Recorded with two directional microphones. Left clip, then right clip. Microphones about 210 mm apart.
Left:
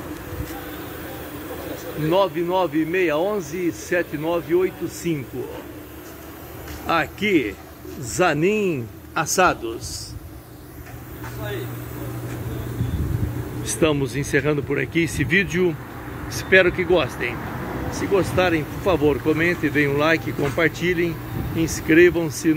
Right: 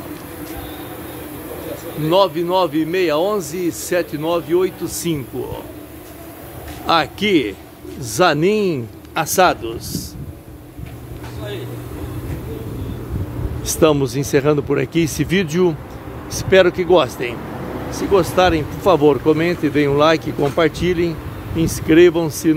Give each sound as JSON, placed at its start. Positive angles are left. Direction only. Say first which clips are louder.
{"t": 2.0, "sound": "a man's voice", "louder": "right 5 dB", "side_deg": -20}
{"t": 6.9, "sound": "a man's voice", "louder": "right 5 dB", "side_deg": -20}
{"t": 9.1, "sound": "speech", "louder": "right 4 dB", "side_deg": -5}
{"t": 13.7, "sound": "speech", "louder": "right 6 dB", "side_deg": -15}